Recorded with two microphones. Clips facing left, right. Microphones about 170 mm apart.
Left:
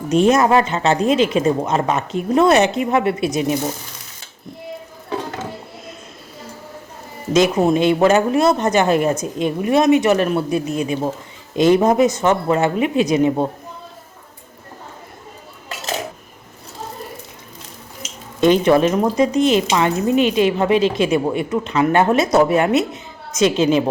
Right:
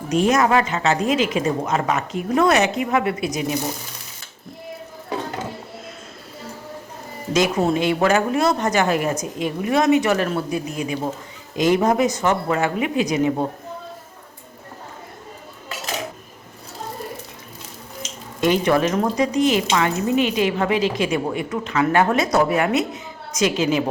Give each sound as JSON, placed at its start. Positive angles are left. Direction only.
{"t": 0.1, "sound": "a woman's voice", "side_deg": 30}
{"t": 7.3, "sound": "a woman's voice", "side_deg": 20}
{"t": 18.3, "sound": "a woman's voice", "side_deg": 25}